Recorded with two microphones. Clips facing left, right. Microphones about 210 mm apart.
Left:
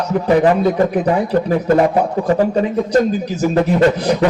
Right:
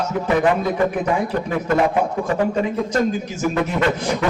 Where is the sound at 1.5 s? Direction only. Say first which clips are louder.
Left 4 dB; 35° left (ahead or behind).